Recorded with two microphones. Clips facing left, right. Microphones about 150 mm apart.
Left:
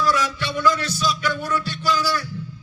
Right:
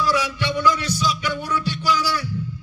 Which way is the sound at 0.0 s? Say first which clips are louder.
Even; 20° right (ahead or behind).